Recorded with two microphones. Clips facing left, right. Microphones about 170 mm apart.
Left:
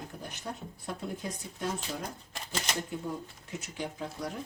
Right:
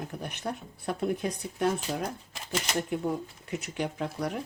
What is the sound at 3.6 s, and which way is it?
Speech, 65° right (ahead or behind).